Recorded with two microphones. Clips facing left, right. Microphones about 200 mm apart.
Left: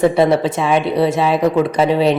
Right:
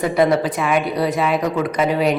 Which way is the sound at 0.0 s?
25° left (ahead or behind).